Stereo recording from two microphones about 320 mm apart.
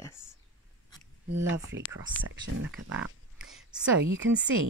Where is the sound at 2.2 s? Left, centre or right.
Right.